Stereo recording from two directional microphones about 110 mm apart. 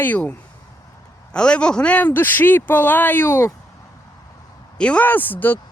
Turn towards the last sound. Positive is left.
turn(degrees=15)  # may be behind; listen again after turning